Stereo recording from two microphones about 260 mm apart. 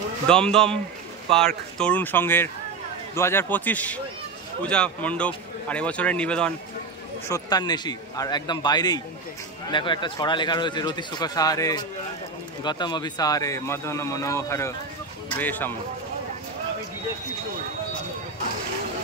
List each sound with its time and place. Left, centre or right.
0.3 s speech: centre
1.8 s speech: centre